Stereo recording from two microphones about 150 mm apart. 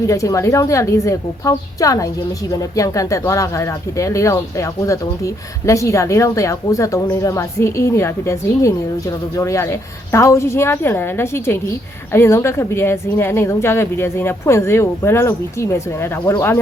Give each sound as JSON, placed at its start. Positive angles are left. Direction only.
{"t": 0.1, "sound": "a woman's voice", "side_deg": 20}